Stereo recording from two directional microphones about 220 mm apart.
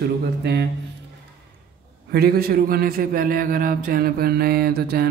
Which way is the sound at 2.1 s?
45° right (ahead or behind).